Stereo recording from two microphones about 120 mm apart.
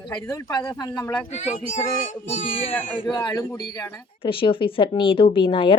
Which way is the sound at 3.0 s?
35° left (ahead or behind).